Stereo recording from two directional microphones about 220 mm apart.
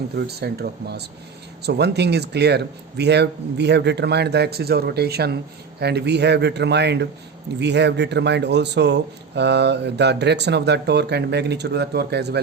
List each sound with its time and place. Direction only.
0.2 s speech: 45° right (ahead or behind)